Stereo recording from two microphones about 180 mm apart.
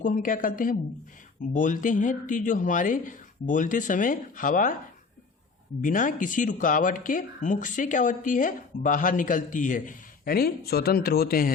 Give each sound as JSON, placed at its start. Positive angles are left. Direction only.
{"t": 0.0, "sound": "speech", "side_deg": 45}
{"t": 5.8, "sound": "speech", "side_deg": 45}